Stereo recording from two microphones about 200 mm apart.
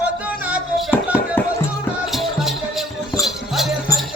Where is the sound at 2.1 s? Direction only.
Centre (ahead or behind).